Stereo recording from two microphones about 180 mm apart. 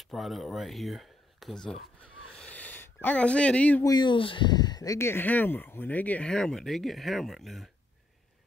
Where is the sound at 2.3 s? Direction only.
10° left (ahead or behind).